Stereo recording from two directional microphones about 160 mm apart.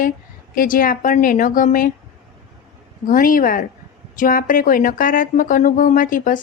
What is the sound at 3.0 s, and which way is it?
Speech, 60° left (ahead or behind).